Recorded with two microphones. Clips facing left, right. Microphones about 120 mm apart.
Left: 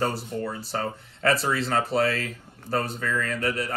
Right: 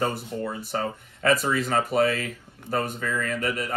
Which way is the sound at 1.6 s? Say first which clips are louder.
Right 1 dB; 15° right (ahead or behind).